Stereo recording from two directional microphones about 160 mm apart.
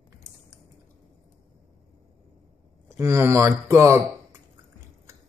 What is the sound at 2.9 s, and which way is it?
Speech, 15° right (ahead or behind).